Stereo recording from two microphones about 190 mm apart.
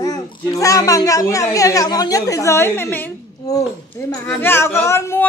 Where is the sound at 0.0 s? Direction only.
20° left (ahead or behind).